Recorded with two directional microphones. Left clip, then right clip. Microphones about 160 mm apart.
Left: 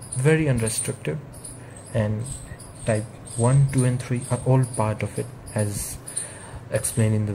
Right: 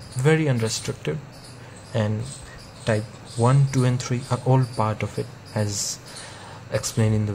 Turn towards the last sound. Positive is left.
turn(degrees=-15)  # may be behind; listen again after turning